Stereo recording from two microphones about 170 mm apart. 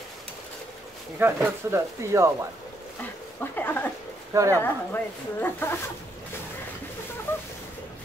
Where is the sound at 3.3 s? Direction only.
10° left (ahead or behind).